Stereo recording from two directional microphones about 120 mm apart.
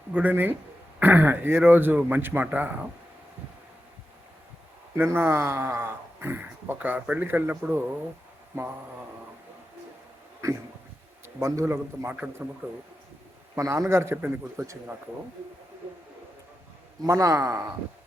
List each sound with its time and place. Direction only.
0.1 s a man's voice: 15° right (ahead or behind)
4.9 s speech: 20° right (ahead or behind)
11.3 s speech: 25° right (ahead or behind)
13.6 s speech: 25° right (ahead or behind)
17.1 s speech: 25° right (ahead or behind)